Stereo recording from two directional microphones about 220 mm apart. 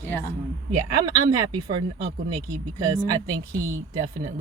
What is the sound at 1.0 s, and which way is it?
Speech, 20° right (ahead or behind).